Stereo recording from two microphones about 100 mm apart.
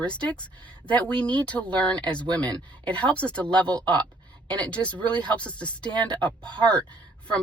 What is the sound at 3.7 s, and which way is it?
Speech, 45° right (ahead or behind).